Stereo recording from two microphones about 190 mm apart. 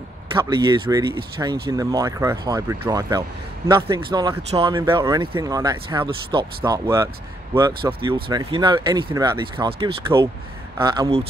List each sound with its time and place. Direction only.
0.3 s speech: 25° right (ahead or behind)